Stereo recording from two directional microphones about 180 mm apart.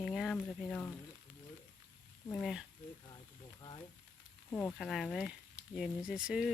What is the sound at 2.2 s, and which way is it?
Speech, 10° left (ahead or behind).